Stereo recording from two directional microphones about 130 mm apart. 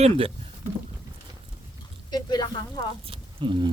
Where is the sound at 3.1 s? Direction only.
40° right (ahead or behind).